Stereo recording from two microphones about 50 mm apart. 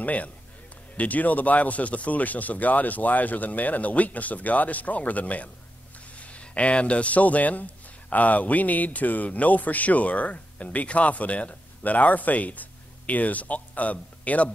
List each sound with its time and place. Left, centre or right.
0.0 s a man's voice: left